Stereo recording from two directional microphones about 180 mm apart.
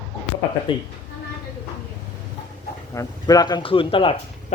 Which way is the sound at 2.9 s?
20° left (ahead or behind).